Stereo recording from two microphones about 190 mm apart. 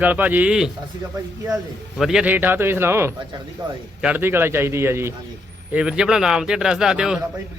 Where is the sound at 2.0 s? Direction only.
5° right (ahead or behind).